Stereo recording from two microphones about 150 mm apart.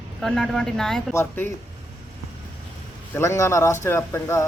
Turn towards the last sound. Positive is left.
turn(degrees=20)  # may be behind; listen again after turning